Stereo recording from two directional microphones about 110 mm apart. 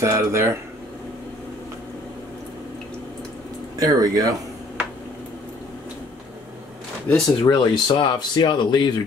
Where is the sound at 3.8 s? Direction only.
35° right (ahead or behind).